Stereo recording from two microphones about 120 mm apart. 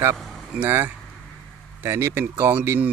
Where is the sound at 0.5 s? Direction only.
20° right (ahead or behind).